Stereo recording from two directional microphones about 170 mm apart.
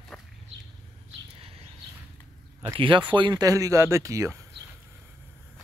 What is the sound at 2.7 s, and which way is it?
Speech, 30° right (ahead or behind).